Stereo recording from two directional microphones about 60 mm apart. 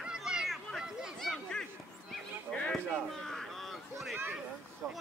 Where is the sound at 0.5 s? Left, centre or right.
Centre.